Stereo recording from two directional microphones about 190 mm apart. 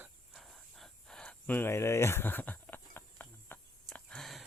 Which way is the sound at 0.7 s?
Centre (ahead or behind).